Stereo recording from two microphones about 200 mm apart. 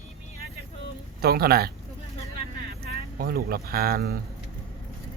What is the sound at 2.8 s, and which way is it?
Speech, 50° right (ahead or behind).